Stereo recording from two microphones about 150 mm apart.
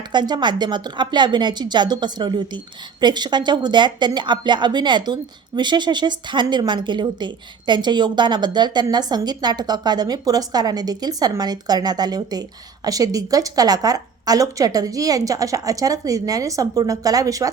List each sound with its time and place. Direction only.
0.1 s speech: 30° right (ahead or behind)